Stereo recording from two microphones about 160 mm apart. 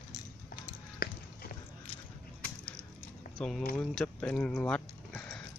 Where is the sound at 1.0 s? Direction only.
65° left (ahead or behind).